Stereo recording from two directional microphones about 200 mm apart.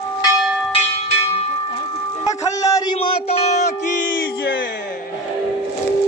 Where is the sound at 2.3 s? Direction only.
15° left (ahead or behind).